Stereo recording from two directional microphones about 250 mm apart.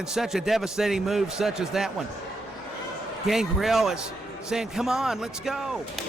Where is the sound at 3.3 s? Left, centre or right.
Centre.